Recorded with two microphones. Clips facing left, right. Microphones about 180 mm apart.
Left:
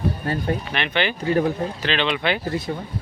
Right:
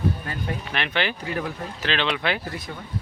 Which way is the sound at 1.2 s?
30° left (ahead or behind).